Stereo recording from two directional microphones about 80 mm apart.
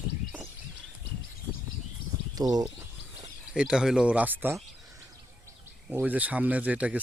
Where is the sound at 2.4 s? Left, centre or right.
Right.